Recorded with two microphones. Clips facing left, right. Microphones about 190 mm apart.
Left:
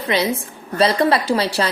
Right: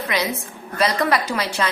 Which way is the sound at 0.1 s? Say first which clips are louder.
Left 7 dB; 30° left (ahead or behind).